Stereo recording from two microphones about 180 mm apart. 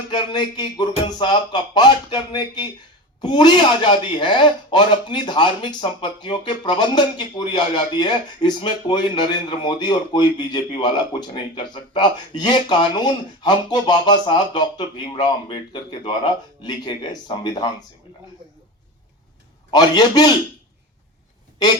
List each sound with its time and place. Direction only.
0.1 s speech: 25° left (ahead or behind)
19.7 s speech: 25° left (ahead or behind)